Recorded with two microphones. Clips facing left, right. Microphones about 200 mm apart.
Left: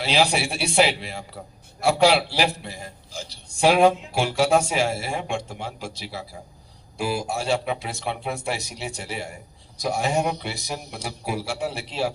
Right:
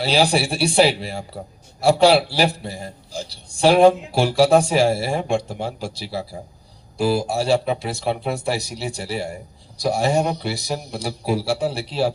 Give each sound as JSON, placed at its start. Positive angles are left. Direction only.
{"t": 0.0, "sound": "a man's voice", "side_deg": -35}